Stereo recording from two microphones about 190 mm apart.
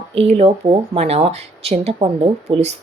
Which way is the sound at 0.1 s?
30° right (ahead or behind).